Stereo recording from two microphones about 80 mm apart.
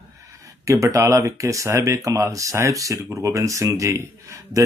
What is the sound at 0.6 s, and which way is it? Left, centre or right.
Speech, right.